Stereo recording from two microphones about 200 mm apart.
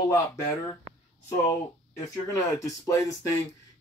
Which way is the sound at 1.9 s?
15° left (ahead or behind).